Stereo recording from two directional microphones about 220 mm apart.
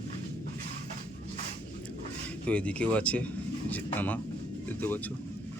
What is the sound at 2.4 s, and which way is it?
Speech, 5° left (ahead or behind).